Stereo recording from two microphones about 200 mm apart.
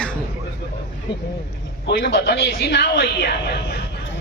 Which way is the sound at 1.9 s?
55° left (ahead or behind).